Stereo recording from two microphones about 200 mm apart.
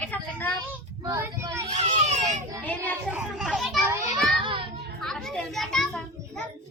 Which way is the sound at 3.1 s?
5° right (ahead or behind).